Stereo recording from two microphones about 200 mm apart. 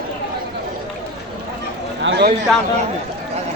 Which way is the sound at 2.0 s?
65° right (ahead or behind).